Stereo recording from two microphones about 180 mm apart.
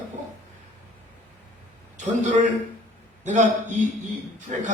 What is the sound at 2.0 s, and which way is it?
A man's voice, 40° right (ahead or behind).